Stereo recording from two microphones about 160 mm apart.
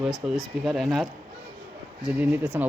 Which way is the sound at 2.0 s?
10° right (ahead or behind).